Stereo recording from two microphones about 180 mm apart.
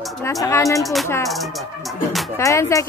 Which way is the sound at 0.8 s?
Centre (ahead or behind).